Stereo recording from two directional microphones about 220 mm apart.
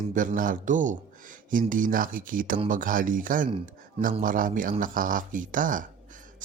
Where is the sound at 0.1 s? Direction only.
35° right (ahead or behind).